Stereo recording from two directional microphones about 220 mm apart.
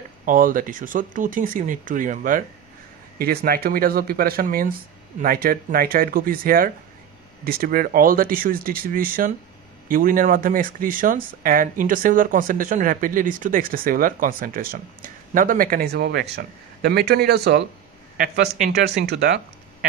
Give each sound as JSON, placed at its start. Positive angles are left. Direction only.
{"t": 0.2, "sound": "speech", "side_deg": -40}